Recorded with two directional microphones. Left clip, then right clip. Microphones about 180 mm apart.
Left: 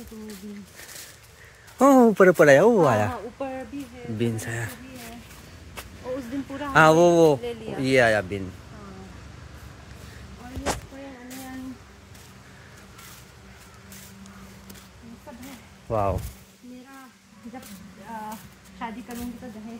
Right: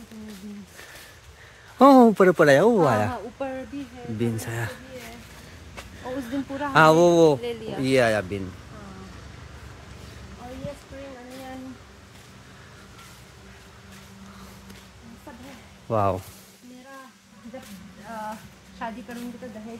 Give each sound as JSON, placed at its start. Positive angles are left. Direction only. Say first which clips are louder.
{"t": 1.8, "sound": "a man's voice", "louder": "right 3 dB", "side_deg": -20}
{"t": 2.0, "sound": "speech", "louder": "left 1 dB", "side_deg": 0}
{"t": 6.0, "sound": "a sound", "louder": "right 1 dB", "side_deg": -20}
{"t": 6.6, "sound": "speech", "louder": "even", "side_deg": -10}
{"t": 15.9, "sound": "speech", "louder": "right 2 dB", "side_deg": -35}